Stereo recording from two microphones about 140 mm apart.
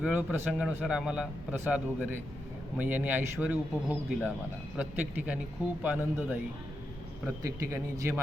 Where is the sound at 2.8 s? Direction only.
10° right (ahead or behind).